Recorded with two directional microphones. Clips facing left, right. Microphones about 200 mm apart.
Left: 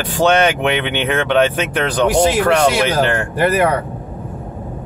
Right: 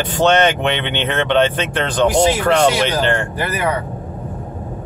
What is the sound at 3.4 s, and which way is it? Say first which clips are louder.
Speech: left 6 dB; 60° left (ahead or behind).